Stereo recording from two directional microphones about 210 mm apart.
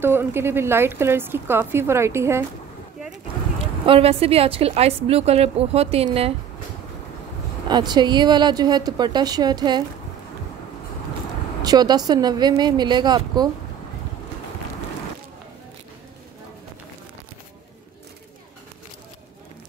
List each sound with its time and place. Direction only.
0.0 s speech: 10° right (ahead or behind)
3.1 s speech: 25° right (ahead or behind)
7.6 s a woman's voice: 20° right (ahead or behind)
11.6 s a woman's voice: 20° right (ahead or behind)